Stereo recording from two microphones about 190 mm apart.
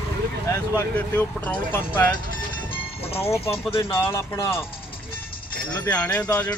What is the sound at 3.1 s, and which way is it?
Speech, 15° left (ahead or behind).